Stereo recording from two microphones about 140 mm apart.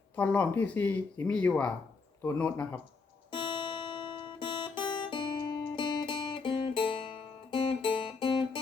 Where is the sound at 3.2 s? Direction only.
35° left (ahead or behind).